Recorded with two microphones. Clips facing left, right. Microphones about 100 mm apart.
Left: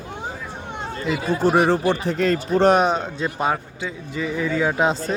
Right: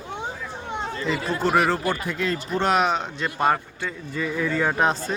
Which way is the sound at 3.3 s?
5° left (ahead or behind).